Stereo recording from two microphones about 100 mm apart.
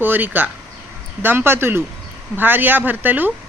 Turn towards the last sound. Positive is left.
turn(degrees=-20)  # may be behind; listen again after turning